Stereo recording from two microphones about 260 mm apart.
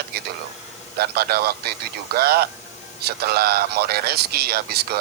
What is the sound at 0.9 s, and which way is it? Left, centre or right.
Speech, right.